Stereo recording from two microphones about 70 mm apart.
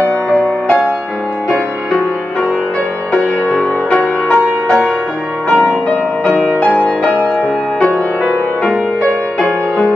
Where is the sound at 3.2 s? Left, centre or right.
Centre.